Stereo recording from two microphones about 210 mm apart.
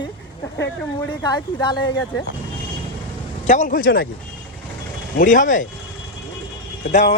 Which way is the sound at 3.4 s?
35° left (ahead or behind).